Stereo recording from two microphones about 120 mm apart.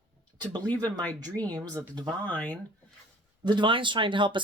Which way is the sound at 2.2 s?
10° left (ahead or behind).